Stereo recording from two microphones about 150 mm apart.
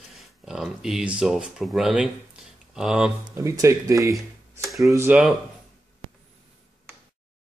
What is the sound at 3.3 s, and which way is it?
Speech, 20° right (ahead or behind).